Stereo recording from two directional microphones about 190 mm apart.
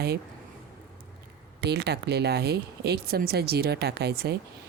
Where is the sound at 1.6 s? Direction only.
60° right (ahead or behind).